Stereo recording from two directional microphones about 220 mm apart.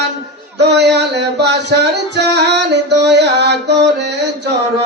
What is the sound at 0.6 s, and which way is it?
Music, 50° right (ahead or behind).